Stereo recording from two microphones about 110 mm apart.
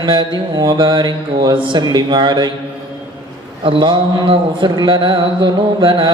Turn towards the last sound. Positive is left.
turn(degrees=-50)  # may be behind; listen again after turning